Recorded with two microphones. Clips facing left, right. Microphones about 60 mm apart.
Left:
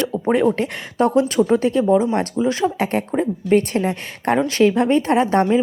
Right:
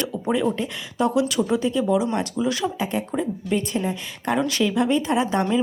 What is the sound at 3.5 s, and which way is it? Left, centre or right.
Speech, left.